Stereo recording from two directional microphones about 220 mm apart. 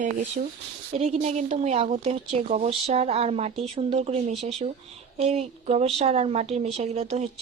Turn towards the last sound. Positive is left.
turn(degrees=-30)  # may be behind; listen again after turning